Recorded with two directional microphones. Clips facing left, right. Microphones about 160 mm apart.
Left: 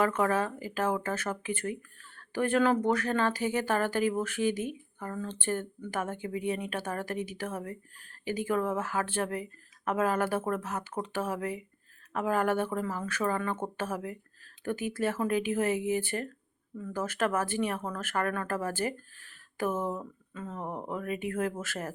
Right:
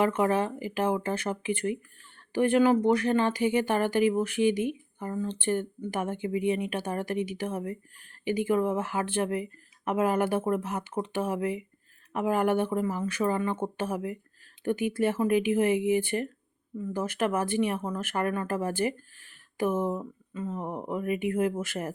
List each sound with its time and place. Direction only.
0.0 s speech: 15° right (ahead or behind)